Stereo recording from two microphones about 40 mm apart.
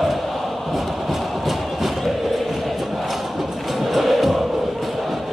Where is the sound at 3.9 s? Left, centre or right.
Centre.